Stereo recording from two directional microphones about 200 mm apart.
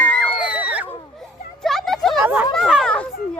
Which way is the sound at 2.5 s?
Centre (ahead or behind).